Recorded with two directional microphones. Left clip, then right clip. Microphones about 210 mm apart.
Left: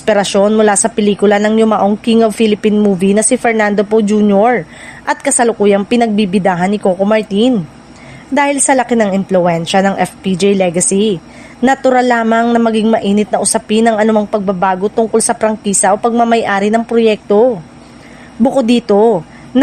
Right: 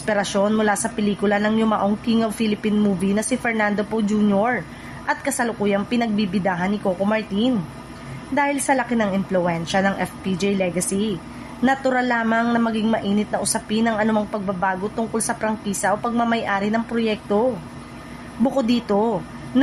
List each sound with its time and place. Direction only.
0.0 s speech: 40° left (ahead or behind)
18.4 s speech: 40° left (ahead or behind)